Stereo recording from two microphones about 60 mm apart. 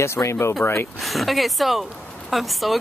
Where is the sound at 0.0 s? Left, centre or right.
Left.